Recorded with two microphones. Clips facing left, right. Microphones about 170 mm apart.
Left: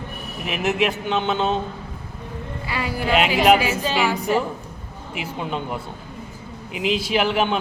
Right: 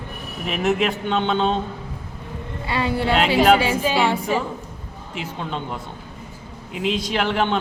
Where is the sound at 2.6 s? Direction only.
30° right (ahead or behind).